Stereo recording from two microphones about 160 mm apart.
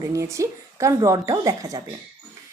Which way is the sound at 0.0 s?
20° right (ahead or behind).